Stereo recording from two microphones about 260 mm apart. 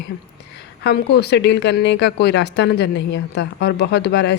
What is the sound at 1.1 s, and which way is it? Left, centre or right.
A woman's voice, left.